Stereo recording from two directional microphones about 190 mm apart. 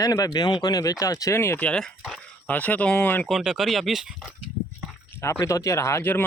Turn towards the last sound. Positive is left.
turn(degrees=10)  # may be behind; listen again after turning